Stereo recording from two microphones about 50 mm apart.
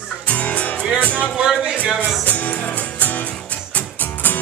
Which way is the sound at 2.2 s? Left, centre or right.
Left.